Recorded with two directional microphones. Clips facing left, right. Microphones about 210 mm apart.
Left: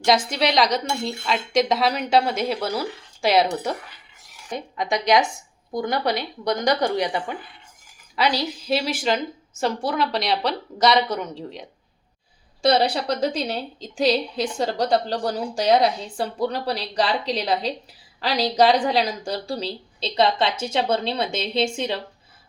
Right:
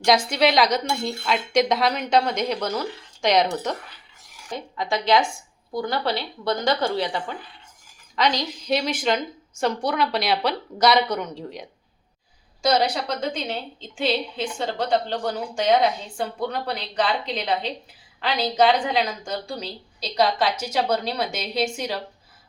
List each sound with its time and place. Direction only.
0.0 s a woman's voice: centre (ahead or behind)
12.7 s a woman's voice: 35° left (ahead or behind)